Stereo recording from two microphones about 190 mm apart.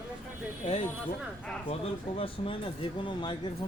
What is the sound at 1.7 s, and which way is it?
Speech, 30° left (ahead or behind).